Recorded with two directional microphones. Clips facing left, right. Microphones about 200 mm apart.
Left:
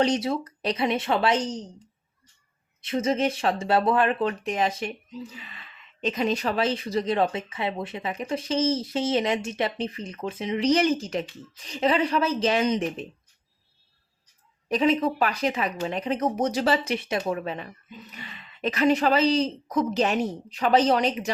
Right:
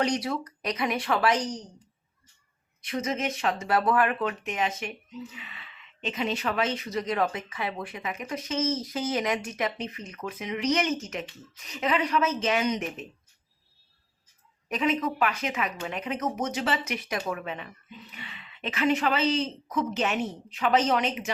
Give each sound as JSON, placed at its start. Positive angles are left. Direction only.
{"t": 0.0, "sound": "a woman's voice", "side_deg": 25}
{"t": 2.8, "sound": "speech", "side_deg": 25}
{"t": 14.7, "sound": "speech", "side_deg": 30}